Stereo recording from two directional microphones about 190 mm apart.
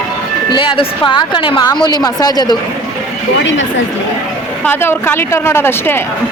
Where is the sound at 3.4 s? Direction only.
75° left (ahead or behind).